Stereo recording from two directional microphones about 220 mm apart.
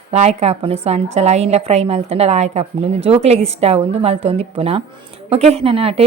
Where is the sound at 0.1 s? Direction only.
30° right (ahead or behind).